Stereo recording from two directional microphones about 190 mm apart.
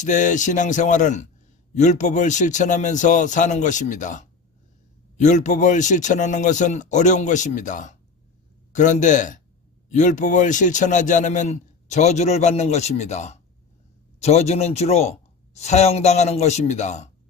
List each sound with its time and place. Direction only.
0.0 s a man's voice: 40° left (ahead or behind)